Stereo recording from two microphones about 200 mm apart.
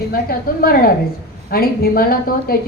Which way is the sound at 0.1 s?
45° left (ahead or behind).